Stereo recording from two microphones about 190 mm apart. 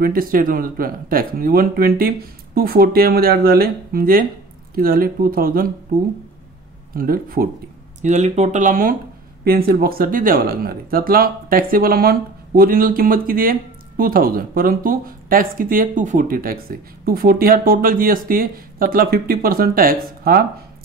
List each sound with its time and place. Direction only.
0.0 s speech: 50° right (ahead or behind)
7.0 s speech: 50° right (ahead or behind)
8.0 s speech: 35° right (ahead or behind)